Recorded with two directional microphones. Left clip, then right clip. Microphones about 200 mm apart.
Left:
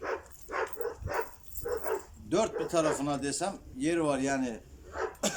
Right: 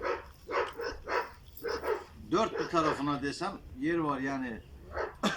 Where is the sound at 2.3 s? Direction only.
20° left (ahead or behind).